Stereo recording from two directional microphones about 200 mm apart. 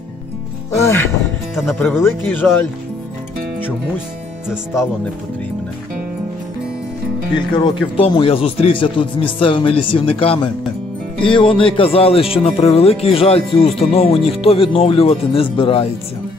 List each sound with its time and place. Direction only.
0.7 s speech: 15° left (ahead or behind)
1.5 s speech: centre (ahead or behind)
7.3 s speech: 25° left (ahead or behind)